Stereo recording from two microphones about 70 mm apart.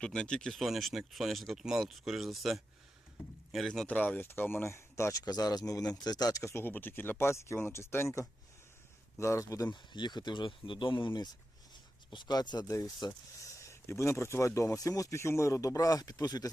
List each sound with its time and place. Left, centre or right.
0.0 s speech: centre
3.8 s speech: left
5.2 s speech: left
6.4 s speech: left
9.6 s speech: left
10.6 s speech: left
11.7 s speech: left
13.1 s speech: left